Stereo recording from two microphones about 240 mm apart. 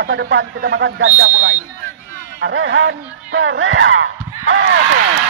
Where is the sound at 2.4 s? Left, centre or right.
Right.